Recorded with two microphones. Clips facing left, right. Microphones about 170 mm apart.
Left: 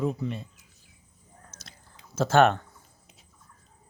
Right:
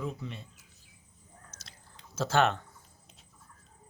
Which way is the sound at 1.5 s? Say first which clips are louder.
Left 3 dB; 55° left (ahead or behind).